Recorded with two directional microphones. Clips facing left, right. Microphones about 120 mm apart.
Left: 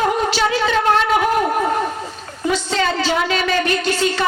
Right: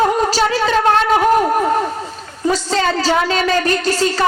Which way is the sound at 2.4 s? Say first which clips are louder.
Right 2 dB; 40° right (ahead or behind).